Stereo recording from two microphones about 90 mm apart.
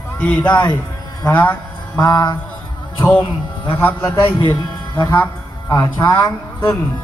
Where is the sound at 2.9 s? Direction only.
20° left (ahead or behind).